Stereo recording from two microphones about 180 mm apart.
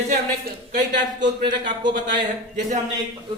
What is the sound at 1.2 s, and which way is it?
Speech, 25° right (ahead or behind).